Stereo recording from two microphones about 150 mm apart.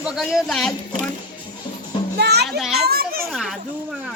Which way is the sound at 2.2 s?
90° right.